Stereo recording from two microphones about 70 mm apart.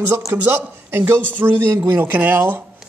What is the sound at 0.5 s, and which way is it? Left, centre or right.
Speech, right.